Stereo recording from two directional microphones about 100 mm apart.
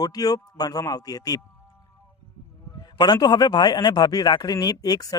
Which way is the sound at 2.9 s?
45° left (ahead or behind).